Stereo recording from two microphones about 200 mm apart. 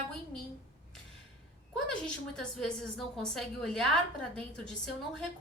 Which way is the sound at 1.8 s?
5° left (ahead or behind).